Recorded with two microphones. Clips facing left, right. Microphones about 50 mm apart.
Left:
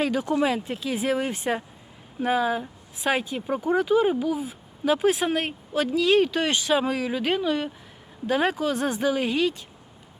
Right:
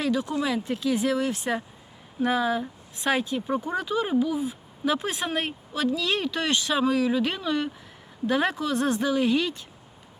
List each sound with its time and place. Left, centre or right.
0.0 s speech: left
0.4 s speech: left; by 9.6 s centre